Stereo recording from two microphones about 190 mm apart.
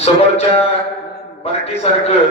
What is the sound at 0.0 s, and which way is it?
Speech, 35° left (ahead or behind).